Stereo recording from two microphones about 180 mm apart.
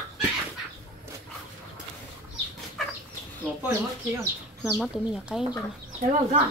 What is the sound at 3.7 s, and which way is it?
Speech, 15° right (ahead or behind).